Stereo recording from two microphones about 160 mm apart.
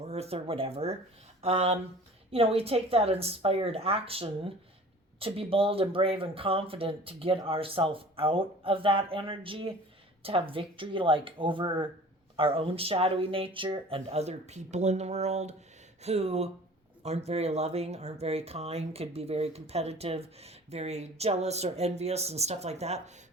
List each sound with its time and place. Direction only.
0.0 s speech: 40° right (ahead or behind)